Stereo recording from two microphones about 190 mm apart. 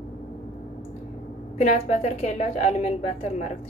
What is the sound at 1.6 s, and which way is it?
A woman's voice, 35° left (ahead or behind).